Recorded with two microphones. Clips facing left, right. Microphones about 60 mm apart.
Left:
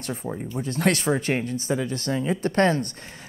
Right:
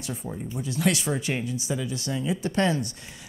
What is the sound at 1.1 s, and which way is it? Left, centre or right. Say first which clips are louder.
Speech: left 4 dB; left.